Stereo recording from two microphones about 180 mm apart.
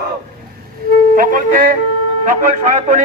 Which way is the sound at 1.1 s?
50° right (ahead or behind).